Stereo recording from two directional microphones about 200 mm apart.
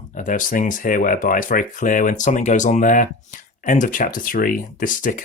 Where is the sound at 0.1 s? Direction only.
40° left (ahead or behind).